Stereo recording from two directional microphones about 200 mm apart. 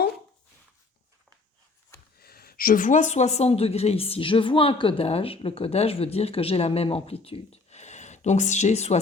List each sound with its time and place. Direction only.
2.1 s a woman's voice: 50° left (ahead or behind); by 9.0 s 35° left (ahead or behind)